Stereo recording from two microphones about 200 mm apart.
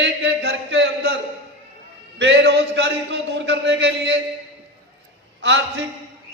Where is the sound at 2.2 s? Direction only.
60° right (ahead or behind).